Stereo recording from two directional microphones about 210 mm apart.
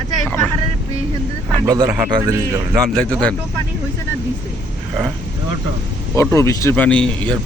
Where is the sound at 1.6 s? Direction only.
15° right (ahead or behind).